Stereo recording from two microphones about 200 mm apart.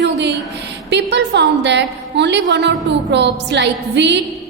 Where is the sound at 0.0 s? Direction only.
60° right (ahead or behind).